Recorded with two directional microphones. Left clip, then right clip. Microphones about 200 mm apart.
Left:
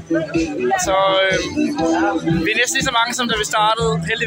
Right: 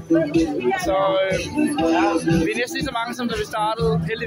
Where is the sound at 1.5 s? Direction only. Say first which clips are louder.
Left 1 dB; 45° left (ahead or behind).